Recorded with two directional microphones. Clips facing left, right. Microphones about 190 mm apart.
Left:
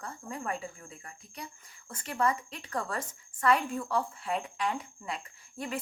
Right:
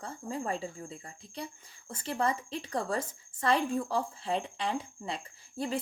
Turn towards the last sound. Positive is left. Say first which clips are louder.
# right 3 dB
turn(degrees=-30)  # may be behind; listen again after turning